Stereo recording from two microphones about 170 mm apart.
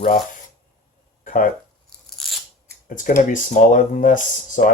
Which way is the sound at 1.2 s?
50° left (ahead or behind).